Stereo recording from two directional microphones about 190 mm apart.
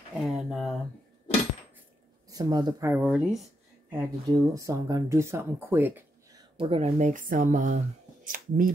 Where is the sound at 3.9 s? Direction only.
20° right (ahead or behind).